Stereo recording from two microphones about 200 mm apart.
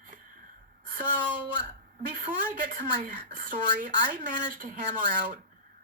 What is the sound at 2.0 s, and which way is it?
Speech, 40° right (ahead or behind).